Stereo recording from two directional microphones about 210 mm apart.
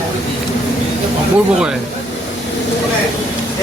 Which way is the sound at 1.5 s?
5° right (ahead or behind).